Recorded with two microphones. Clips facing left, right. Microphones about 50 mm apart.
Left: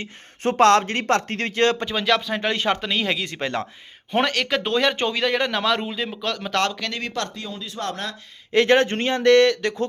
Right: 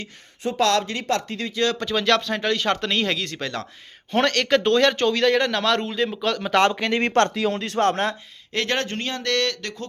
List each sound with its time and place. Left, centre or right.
0.4 s speech: left
1.7 s speech: left
4.1 s speech: centre
6.6 s speech: right
7.0 s speech: right
7.4 s speech: right
7.9 s speech: right
8.5 s a man's voice: centre